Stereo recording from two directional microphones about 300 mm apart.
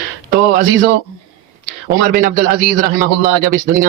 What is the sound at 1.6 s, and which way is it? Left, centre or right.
Speech, right.